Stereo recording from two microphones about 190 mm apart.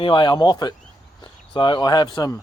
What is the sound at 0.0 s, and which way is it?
Speech, 25° left (ahead or behind).